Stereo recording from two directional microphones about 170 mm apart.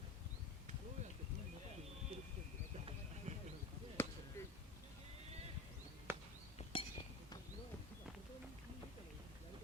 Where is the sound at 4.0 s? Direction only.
10° left (ahead or behind).